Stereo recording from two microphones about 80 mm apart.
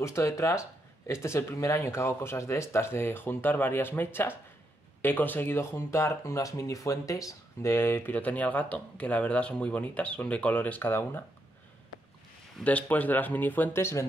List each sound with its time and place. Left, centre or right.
0.0 s speech: left
12.6 s speech: centre